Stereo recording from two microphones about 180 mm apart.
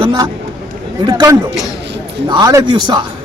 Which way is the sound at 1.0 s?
20° right (ahead or behind).